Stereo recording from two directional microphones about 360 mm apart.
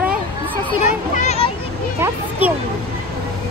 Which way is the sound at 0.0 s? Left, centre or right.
Centre.